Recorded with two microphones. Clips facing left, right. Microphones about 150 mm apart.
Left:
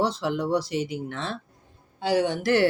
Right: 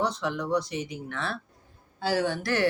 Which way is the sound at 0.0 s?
30° left (ahead or behind).